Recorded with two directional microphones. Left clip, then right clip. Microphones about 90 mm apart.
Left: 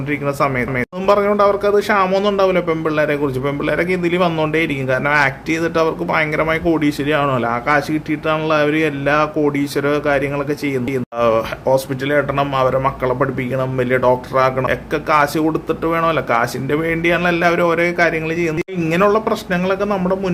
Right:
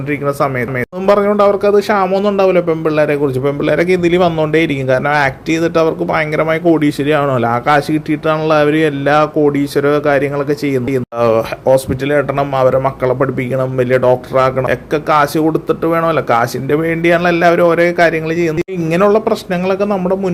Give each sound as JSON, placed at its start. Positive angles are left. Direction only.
{"t": 0.1, "sound": "a man's voice", "side_deg": -30}